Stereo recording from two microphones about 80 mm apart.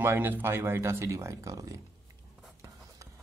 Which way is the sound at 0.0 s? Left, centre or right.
Right.